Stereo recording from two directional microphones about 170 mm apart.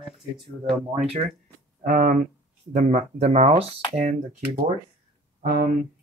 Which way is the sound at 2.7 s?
40° right (ahead or behind).